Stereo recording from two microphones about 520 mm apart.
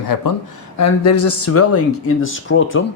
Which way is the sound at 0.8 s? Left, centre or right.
Left.